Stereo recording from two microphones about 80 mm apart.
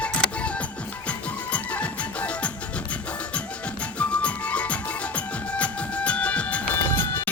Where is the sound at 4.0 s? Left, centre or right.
Centre.